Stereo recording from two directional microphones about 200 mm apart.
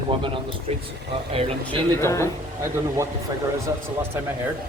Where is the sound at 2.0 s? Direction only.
15° left (ahead or behind).